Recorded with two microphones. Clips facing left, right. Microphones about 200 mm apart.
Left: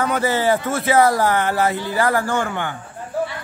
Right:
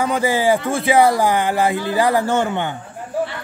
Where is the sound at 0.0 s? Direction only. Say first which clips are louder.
Right 1 dB; 10° right (ahead or behind).